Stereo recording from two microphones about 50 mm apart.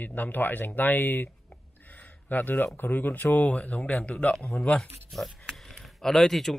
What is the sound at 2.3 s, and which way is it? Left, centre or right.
Speech, left.